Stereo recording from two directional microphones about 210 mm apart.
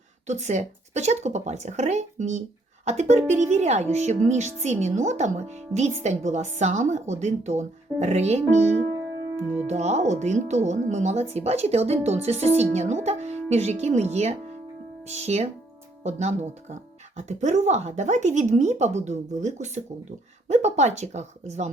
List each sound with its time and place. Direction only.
0.3 s speech: 35° right (ahead or behind)
9.6 s speech: 30° right (ahead or behind)